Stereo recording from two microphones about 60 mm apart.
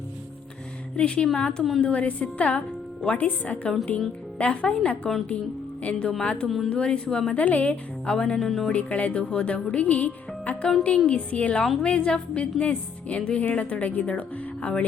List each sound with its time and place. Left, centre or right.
0.9 s a woman's voice: centre
8.7 s speech: left